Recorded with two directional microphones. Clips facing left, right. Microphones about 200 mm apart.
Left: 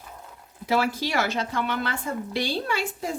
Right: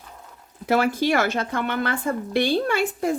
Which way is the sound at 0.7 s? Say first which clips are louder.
Right 5 dB; 55° right (ahead or behind).